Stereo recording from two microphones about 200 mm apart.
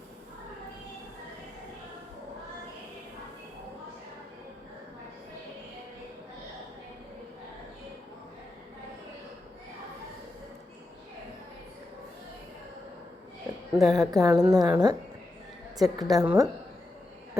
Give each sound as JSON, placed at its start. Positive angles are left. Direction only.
{"t": 13.7, "sound": "a woman's voice", "side_deg": 0}
{"t": 14.1, "sound": "a woman's voice", "side_deg": -15}